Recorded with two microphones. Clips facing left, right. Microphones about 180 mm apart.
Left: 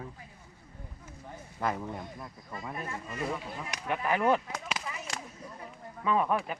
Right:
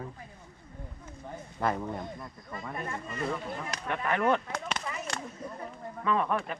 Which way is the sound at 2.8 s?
5° left (ahead or behind).